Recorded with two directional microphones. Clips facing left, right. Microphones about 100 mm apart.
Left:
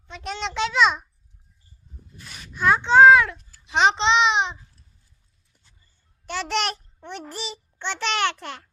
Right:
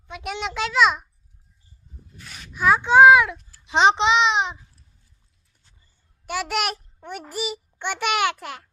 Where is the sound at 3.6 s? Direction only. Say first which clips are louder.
Right 2 dB; 20° right (ahead or behind).